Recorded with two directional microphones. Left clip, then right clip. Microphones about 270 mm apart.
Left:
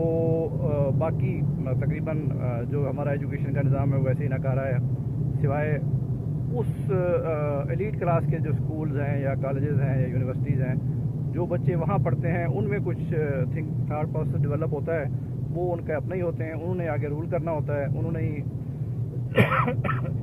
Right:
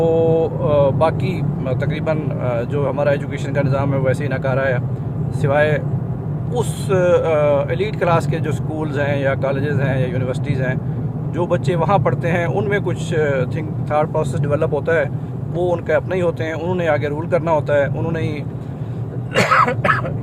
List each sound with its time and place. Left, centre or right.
0.0 s speech: right
19.4 s cough: centre